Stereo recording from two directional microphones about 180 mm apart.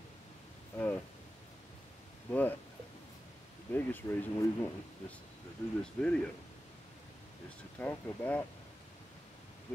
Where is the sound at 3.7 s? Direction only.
10° left (ahead or behind).